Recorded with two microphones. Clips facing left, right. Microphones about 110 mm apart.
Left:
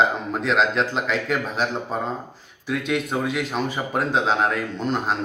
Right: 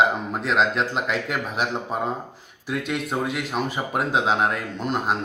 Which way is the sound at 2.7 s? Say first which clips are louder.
Left 2 dB; centre (ahead or behind).